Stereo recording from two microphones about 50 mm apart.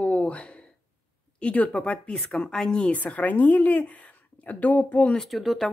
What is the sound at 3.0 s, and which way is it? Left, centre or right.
A woman's voice, left.